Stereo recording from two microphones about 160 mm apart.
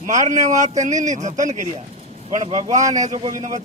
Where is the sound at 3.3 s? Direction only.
50° right (ahead or behind).